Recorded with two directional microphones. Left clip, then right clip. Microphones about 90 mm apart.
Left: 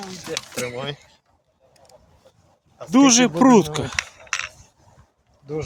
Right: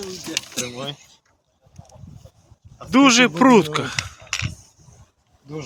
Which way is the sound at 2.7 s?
55° left (ahead or behind).